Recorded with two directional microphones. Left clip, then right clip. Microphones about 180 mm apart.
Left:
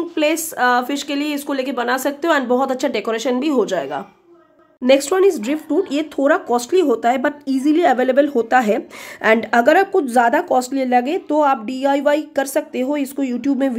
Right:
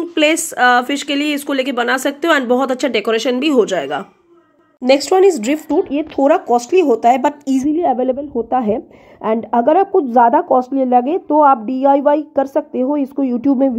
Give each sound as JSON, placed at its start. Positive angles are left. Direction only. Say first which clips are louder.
{"t": 0.1, "sound": "speech", "louder": "right 6 dB", "side_deg": -15}
{"t": 5.7, "sound": "a woman's voice", "louder": "even", "side_deg": 5}
{"t": 6.7, "sound": "a woman's voice", "louder": "right 4 dB", "side_deg": -10}